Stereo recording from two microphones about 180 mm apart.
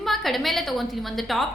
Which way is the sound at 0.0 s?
Centre (ahead or behind).